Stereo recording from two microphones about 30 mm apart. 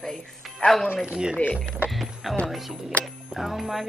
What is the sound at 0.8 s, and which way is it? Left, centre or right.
Speech, right.